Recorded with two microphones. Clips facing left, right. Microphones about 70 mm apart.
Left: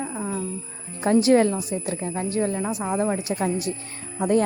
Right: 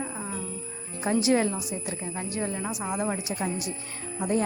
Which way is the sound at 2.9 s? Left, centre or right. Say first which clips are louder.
Left 6 dB; left.